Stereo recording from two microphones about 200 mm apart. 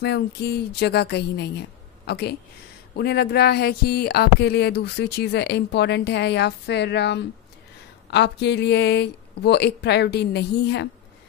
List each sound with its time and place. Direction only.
0.0 s speech: 55° left (ahead or behind)